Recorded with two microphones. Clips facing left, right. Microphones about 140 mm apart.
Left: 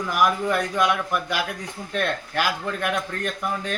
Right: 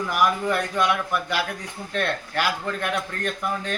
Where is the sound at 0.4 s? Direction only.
10° left (ahead or behind).